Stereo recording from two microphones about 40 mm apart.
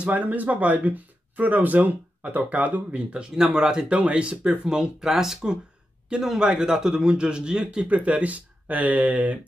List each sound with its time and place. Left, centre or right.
0.1 s speech: right
3.2 s speech: right
3.9 s speech: right
5.0 s speech: centre
6.1 s speech: right
7.9 s speech: right